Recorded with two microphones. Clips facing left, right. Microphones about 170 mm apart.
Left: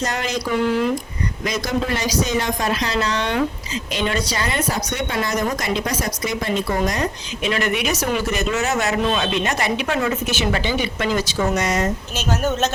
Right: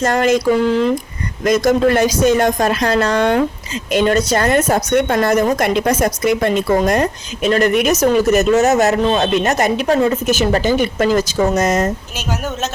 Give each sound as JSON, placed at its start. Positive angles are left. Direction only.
{"t": 0.0, "sound": "a woman's voice", "side_deg": -50}
{"t": 1.5, "sound": "a woman's voice", "side_deg": -50}